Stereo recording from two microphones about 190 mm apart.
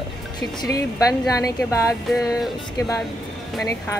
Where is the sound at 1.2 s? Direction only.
20° left (ahead or behind).